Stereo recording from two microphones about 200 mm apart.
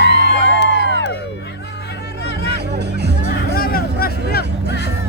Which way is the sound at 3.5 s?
50° left (ahead or behind).